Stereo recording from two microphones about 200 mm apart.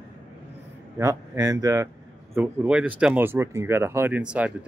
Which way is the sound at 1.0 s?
15° right (ahead or behind).